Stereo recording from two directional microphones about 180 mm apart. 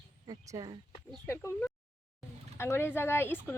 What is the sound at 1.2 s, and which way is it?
Speech, 15° left (ahead or behind).